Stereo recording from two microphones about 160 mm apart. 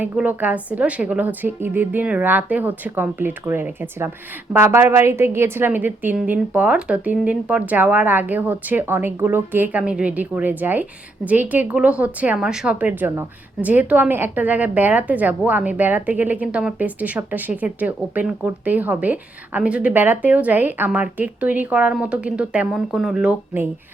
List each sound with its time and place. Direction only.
0.0 s a woman's voice: 10° right (ahead or behind)